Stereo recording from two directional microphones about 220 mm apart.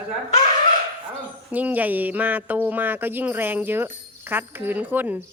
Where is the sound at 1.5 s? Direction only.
5° right (ahead or behind).